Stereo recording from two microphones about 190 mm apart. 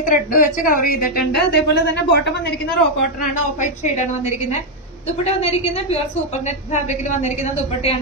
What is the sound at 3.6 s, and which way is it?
Speech, 40° left (ahead or behind).